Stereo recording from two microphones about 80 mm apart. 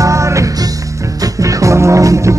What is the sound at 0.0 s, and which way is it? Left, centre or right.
Music, right.